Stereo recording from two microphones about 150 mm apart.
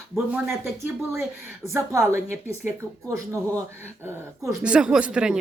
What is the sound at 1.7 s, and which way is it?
A woman's voice, 20° right (ahead or behind).